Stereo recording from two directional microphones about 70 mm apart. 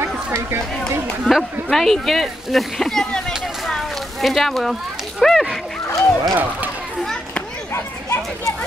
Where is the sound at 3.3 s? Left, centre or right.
Centre.